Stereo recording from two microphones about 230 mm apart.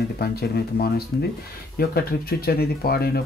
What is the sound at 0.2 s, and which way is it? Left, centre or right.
Speech, left.